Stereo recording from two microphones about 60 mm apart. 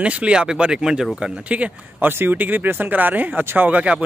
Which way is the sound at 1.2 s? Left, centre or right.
Right.